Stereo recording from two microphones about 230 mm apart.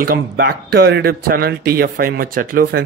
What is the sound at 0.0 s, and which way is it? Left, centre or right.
A man's voice, right.